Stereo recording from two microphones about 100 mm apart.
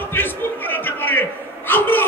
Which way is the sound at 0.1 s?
20° left (ahead or behind).